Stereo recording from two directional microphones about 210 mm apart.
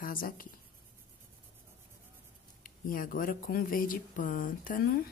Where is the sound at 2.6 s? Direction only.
40° left (ahead or behind).